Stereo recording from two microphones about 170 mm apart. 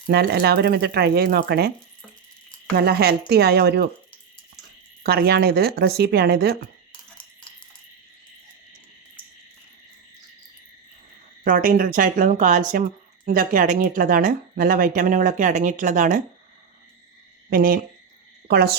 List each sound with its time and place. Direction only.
0.1 s speech: 70° right (ahead or behind)
2.7 s speech: 65° right (ahead or behind)
5.0 s speech: 70° right (ahead or behind)
11.4 s speech: 55° right (ahead or behind)
17.5 s speech: 55° right (ahead or behind)
18.4 s speech: 65° right (ahead or behind)